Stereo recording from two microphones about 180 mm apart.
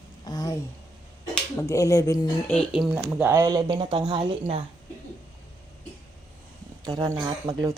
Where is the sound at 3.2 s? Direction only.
15° right (ahead or behind).